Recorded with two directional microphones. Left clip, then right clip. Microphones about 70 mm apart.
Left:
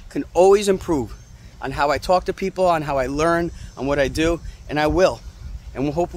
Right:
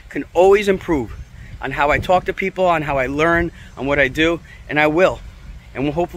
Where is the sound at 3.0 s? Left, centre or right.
Centre.